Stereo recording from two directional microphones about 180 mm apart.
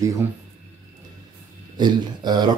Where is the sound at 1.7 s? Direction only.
25° right (ahead or behind).